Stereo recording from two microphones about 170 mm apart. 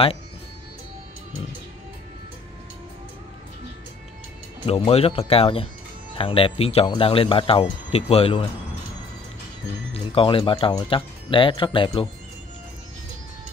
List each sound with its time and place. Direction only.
4.6 s speech: 35° left (ahead or behind)
9.9 s speech: 30° left (ahead or behind)